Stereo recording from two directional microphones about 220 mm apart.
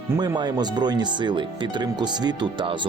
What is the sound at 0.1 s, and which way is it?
Speech, 15° right (ahead or behind).